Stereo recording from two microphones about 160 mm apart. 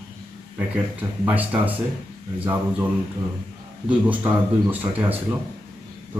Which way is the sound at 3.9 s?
10° right (ahead or behind).